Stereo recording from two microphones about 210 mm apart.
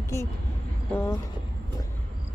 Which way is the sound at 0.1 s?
15° left (ahead or behind).